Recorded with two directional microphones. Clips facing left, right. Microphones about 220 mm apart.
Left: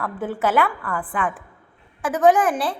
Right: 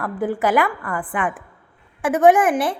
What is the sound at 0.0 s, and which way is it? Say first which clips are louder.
Speech: right 3 dB; 10° right (ahead or behind).